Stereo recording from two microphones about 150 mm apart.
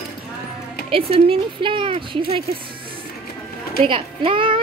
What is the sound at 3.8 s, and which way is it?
Speech, 35° right (ahead or behind).